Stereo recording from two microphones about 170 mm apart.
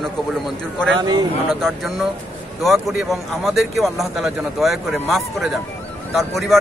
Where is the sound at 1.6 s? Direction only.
Centre (ahead or behind).